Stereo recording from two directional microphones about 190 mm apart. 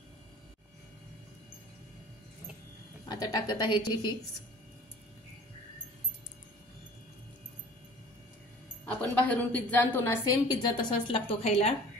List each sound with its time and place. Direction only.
3.1 s a woman's voice: 20° left (ahead or behind)
9.1 s a woman's voice: 10° left (ahead or behind); by 11.7 s 30° left (ahead or behind)